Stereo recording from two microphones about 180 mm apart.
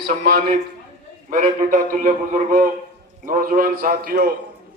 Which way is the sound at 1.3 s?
45° right (ahead or behind).